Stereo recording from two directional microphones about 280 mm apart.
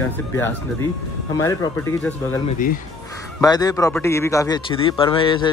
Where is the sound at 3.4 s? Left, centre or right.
Centre.